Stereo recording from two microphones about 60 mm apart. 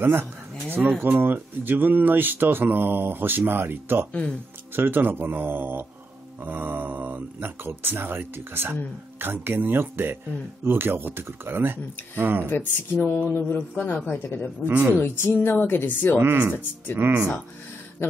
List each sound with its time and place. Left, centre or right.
0.0 s speech: right
4.1 s speech: centre
4.7 s speech: right
12.4 s speech: left
14.7 s speech: right
15.0 s speech: left